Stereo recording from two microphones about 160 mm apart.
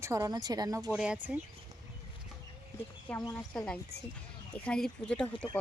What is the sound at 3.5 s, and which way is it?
Speech, 5° left (ahead or behind).